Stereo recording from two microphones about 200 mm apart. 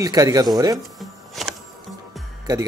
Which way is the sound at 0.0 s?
15° right (ahead or behind).